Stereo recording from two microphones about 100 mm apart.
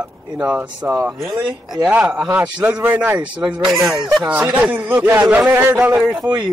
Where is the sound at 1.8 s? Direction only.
10° right (ahead or behind).